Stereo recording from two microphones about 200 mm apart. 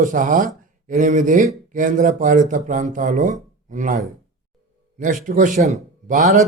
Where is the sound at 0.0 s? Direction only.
40° right (ahead or behind).